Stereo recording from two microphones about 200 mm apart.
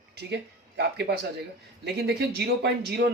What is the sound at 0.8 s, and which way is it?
A man's voice, 55° right (ahead or behind).